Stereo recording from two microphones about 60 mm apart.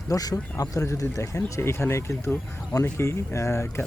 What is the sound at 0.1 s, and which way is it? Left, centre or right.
Speech, left.